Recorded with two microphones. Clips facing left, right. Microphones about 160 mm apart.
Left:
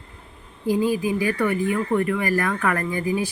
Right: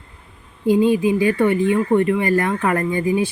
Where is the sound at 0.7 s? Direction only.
25° right (ahead or behind).